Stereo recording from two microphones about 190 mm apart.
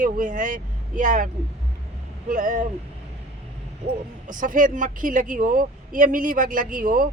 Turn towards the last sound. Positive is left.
turn(degrees=-45)  # may be behind; listen again after turning